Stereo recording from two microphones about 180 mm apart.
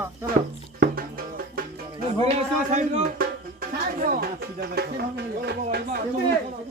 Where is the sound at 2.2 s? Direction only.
40° right (ahead or behind); by 6.0 s 60° right (ahead or behind).